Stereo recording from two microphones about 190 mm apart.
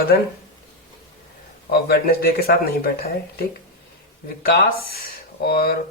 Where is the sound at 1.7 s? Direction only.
55° left (ahead or behind).